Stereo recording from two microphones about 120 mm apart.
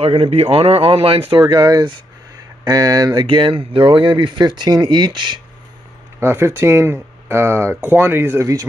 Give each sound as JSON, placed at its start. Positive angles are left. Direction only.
{"t": 0.0, "sound": "speech", "side_deg": -55}
{"t": 1.6, "sound": "speech", "side_deg": -40}
{"t": 3.2, "sound": "speech", "side_deg": -45}
{"t": 6.1, "sound": "speech", "side_deg": -20}